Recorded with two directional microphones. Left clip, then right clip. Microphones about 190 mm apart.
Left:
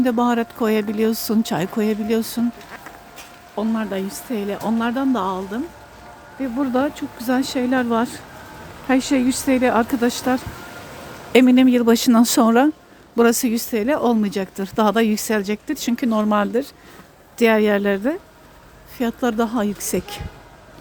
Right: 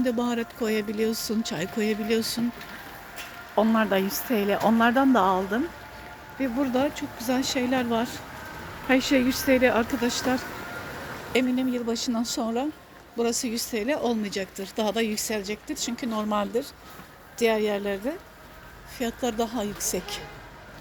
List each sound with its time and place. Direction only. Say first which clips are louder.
0.0 s speech: left 8 dB; 50° left (ahead or behind)
3.5 s speech: right 2 dB; 10° left (ahead or behind)
6.7 s speech: left 5 dB; 40° left (ahead or behind)
8.9 s speech: left 3 dB; 35° left (ahead or behind); by 20.2 s 60° left (ahead or behind)